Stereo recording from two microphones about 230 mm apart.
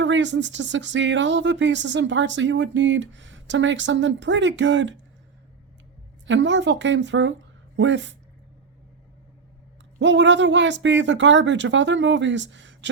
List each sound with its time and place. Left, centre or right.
0.0 s speech: right
6.2 s speech: right
10.0 s speech: right